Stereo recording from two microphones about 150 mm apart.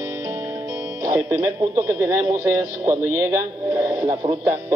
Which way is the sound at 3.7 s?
25° right (ahead or behind).